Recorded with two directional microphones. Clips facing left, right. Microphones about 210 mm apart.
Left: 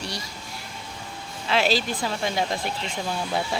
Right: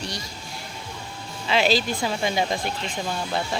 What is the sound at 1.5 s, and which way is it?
Speech, centre (ahead or behind).